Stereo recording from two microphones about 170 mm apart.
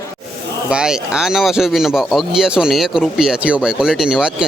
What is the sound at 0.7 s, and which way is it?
Speech, 5° right (ahead or behind).